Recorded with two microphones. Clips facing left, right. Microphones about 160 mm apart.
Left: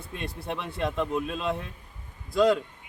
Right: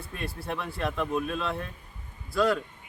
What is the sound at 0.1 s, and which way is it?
Speech, 20° left (ahead or behind).